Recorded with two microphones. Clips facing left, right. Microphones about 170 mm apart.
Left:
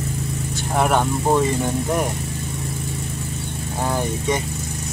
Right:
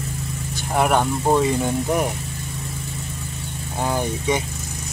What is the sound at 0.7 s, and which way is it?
Speech, 5° right (ahead or behind).